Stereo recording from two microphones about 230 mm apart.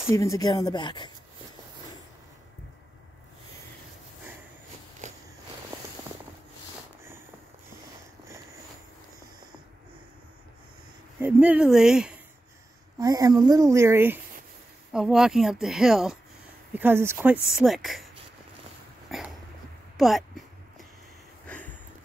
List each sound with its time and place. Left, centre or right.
0.1 s speech: centre
5.0 s a sound: right
11.1 s a woman's voice: centre
13.0 s a woman's voice: centre
19.0 s dog: centre
20.0 s a sound: centre